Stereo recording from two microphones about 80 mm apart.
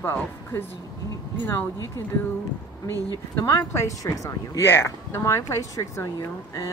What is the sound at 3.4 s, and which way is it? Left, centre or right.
Speech, left.